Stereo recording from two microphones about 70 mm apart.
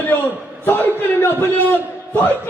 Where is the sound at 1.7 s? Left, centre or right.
Left.